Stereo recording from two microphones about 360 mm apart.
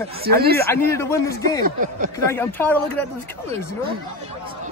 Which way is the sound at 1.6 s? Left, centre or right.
Right.